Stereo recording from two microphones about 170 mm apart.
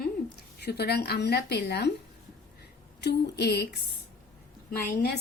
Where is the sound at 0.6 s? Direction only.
70° left (ahead or behind).